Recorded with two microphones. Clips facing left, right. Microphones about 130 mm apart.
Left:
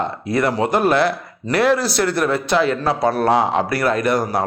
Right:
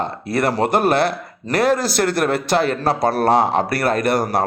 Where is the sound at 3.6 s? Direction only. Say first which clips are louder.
Even; 60° right (ahead or behind).